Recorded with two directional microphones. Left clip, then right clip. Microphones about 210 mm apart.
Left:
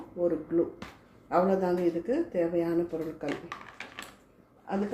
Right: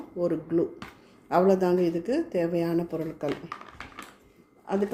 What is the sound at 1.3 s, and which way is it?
A woman's voice, 50° right (ahead or behind).